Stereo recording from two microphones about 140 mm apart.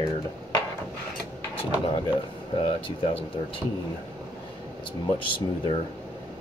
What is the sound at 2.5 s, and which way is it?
Speech, 40° left (ahead or behind).